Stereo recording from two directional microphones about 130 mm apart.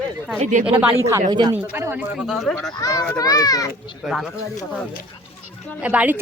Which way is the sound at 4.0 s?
5° right (ahead or behind).